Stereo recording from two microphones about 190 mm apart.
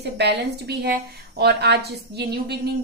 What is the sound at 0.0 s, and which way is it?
A woman's voice, 60° right (ahead or behind).